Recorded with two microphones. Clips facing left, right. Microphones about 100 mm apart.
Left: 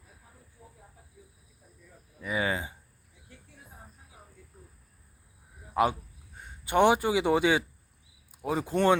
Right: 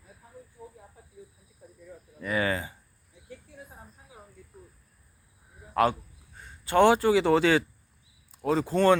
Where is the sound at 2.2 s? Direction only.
10° left (ahead or behind).